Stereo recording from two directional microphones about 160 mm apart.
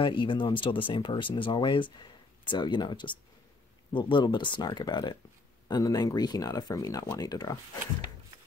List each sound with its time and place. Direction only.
0.0 s speech: 30° left (ahead or behind)